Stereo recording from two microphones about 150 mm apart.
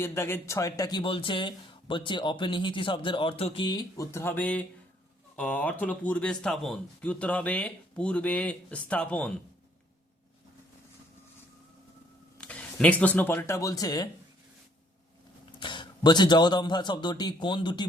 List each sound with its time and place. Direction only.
0.0 s speech: 15° left (ahead or behind)
12.4 s speech: 5° left (ahead or behind); by 14.1 s 25° left (ahead or behind)
15.5 s a man's voice: 30° left (ahead or behind)